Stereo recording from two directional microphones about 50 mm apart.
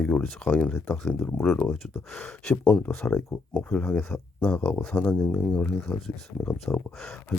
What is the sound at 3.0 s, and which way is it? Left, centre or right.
Speech, left.